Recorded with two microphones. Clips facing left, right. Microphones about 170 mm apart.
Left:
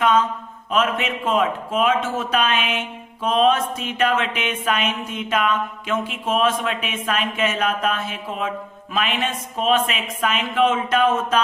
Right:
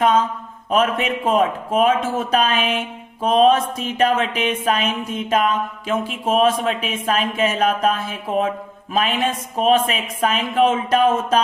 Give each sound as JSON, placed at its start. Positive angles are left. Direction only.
{"t": 0.7, "sound": "a man's voice", "side_deg": -40}